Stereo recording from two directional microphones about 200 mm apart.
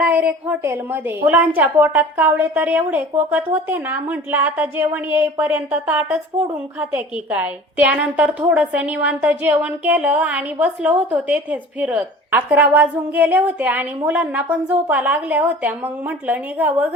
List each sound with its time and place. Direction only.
0.0 s a woman's voice: 5° right (ahead or behind)